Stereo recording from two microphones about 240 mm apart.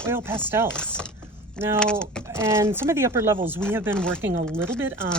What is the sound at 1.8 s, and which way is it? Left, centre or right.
Speech, centre.